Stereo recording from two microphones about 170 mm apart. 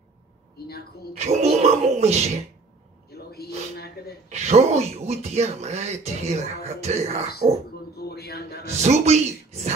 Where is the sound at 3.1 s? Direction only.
65° left (ahead or behind).